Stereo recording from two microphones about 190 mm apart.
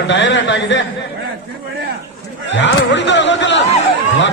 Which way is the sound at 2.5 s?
70° left (ahead or behind).